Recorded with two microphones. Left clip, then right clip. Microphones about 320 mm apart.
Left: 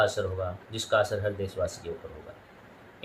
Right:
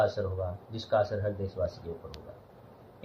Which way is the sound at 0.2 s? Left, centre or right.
Left.